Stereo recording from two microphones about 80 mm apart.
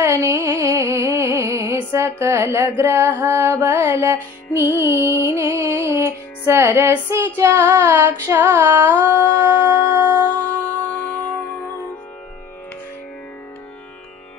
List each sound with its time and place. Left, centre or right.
0.0 s music: right
10.3 s music: centre